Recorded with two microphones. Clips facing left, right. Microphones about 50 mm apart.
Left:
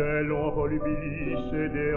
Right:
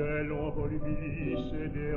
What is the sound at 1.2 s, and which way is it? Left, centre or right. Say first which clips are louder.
Mantra: left 4 dB; left.